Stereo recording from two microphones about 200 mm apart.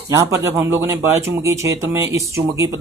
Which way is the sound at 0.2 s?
15° right (ahead or behind).